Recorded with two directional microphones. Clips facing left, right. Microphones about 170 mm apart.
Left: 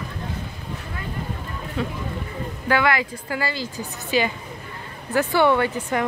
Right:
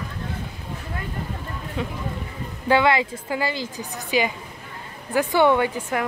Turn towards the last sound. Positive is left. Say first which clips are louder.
# even
turn(degrees=-15)  # may be behind; listen again after turning